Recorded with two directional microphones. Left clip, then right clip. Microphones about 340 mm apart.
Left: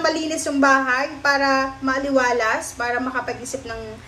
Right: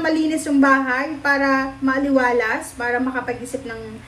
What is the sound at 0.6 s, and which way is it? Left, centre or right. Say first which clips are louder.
A woman's voice: even; centre.